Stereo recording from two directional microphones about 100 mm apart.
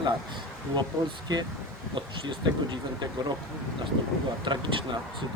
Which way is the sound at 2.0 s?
50° right (ahead or behind).